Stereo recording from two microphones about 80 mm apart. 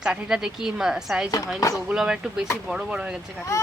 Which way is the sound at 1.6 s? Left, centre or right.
Left.